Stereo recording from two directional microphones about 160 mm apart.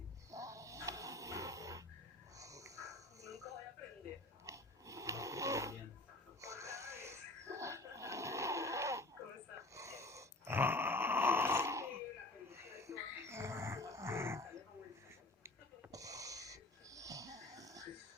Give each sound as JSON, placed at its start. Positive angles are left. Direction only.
{"t": 0.3, "sound": "snoring", "side_deg": -20}
{"t": 2.4, "sound": "snort", "side_deg": -20}
{"t": 3.2, "sound": "a sound", "side_deg": -20}
{"t": 4.4, "sound": "snoring", "side_deg": -20}
{"t": 6.4, "sound": "a sound", "side_deg": -20}
{"t": 13.2, "sound": "grunt", "side_deg": -15}
{"t": 15.4, "sound": "wheeze", "side_deg": -20}